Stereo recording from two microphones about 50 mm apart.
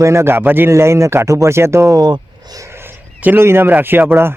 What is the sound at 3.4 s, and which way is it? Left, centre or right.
Speech, right.